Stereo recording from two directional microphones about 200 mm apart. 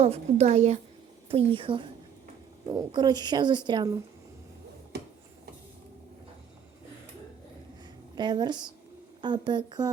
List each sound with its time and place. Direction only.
0.0 s a woman's voice: 30° right (ahead or behind)
8.1 s speech: 20° right (ahead or behind)